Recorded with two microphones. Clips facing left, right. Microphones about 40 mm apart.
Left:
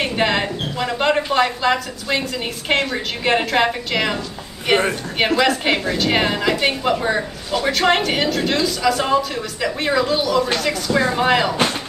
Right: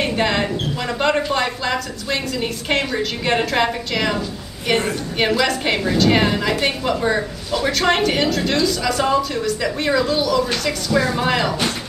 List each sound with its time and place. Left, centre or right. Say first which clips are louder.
0.0 s a woman's voice: even; centre
10.9 s speech: even; left
11.1 s a woman's voice: left 2 dB; centre